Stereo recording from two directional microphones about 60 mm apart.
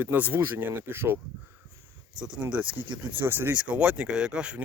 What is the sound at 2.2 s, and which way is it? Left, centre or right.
Speech, centre.